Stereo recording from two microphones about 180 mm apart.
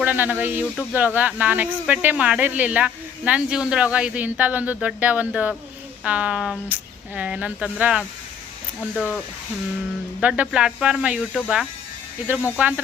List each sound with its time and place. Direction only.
0.0 s speech: 10° right (ahead or behind)
10.2 s speech: 5° right (ahead or behind)